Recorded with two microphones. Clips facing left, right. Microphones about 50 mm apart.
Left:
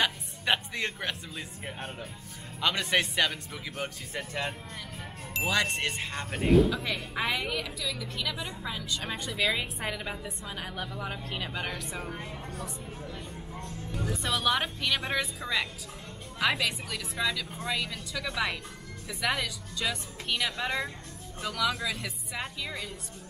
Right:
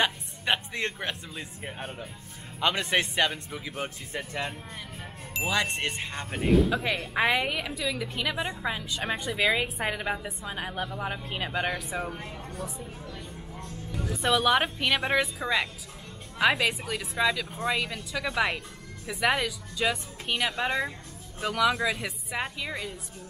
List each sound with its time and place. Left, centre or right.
0.0 s a man's voice: centre
5.6 s a woman's voice: centre
5.9 s speech: centre
6.8 s a woman's voice: centre
12.1 s speech: centre
13.0 s music: centre
14.1 s a woman's voice: centre